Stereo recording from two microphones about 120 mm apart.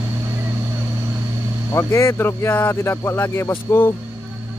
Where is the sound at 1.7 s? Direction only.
20° left (ahead or behind).